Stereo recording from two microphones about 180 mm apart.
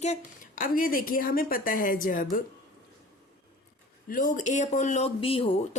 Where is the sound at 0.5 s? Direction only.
50° left (ahead or behind).